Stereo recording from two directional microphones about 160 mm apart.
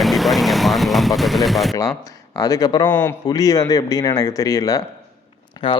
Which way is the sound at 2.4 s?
25° left (ahead or behind).